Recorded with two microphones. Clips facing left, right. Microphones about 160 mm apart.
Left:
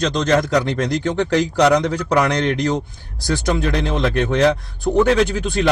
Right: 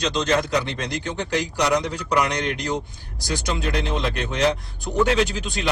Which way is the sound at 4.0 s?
55° left (ahead or behind).